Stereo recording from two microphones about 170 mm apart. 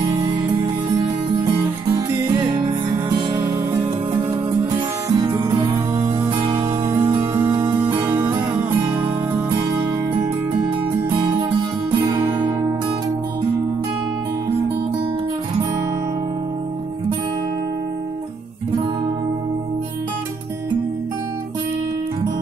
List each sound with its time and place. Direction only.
5.0 s music: 25° right (ahead or behind)
7.6 s music: 25° right (ahead or behind)
8.0 s music: 10° right (ahead or behind)
12.1 s music: 25° right (ahead or behind)